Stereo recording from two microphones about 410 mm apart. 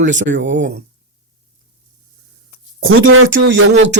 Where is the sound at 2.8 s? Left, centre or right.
Right.